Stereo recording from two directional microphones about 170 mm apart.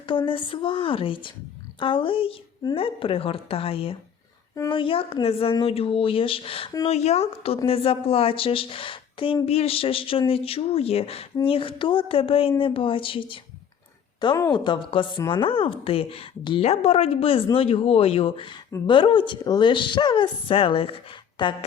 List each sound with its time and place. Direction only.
0.0 s a woman's voice: 30° left (ahead or behind)